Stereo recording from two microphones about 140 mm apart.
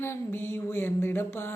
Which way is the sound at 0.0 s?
15° left (ahead or behind).